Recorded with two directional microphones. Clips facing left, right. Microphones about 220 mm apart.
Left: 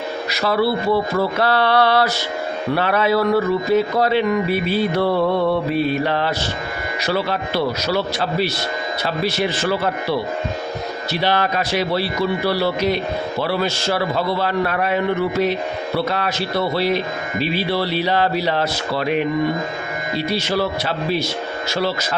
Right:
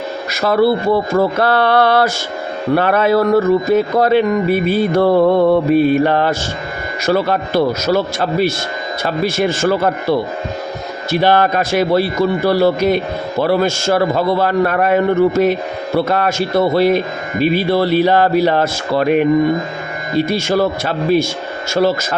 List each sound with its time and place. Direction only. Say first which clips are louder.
0.3 s speech: right 6 dB; 50° right (ahead or behind)